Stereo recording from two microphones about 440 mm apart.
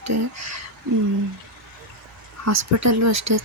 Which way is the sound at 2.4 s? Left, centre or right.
Right.